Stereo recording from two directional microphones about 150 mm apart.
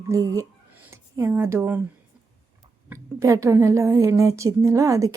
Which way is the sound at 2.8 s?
20° right (ahead or behind).